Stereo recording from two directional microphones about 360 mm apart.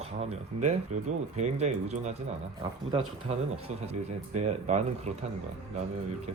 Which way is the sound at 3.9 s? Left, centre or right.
Centre.